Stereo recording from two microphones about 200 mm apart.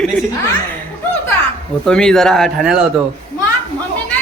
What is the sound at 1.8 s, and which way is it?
Speech, 5° left (ahead or behind).